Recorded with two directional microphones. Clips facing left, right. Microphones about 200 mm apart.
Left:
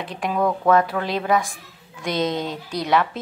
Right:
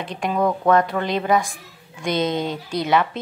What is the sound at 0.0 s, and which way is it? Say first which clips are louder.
Speech: right 1 dB; centre (ahead or behind).